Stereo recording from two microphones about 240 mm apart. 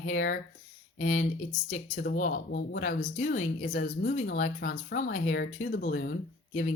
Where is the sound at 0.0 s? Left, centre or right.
Left.